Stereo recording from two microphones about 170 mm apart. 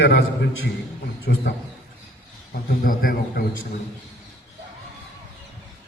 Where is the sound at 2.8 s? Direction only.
55° left (ahead or behind).